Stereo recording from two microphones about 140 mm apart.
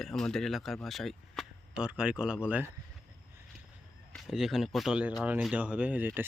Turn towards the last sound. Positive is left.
turn(degrees=-15)  # may be behind; listen again after turning